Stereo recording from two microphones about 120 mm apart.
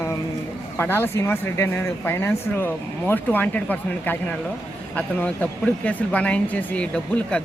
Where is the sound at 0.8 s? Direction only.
20° left (ahead or behind).